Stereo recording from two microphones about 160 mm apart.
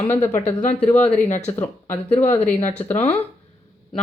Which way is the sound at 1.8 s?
15° left (ahead or behind).